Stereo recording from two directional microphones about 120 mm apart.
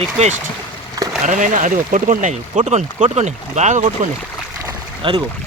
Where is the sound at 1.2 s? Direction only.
90° right.